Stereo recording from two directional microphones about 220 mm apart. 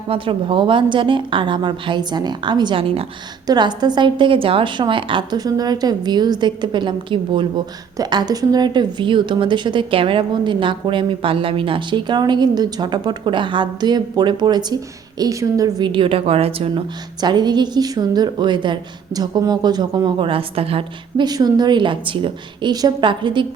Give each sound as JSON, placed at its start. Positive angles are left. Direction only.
{"t": 0.1, "sound": "a woman's voice", "side_deg": -25}